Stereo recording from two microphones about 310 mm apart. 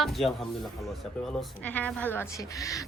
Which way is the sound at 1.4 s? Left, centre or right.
Centre.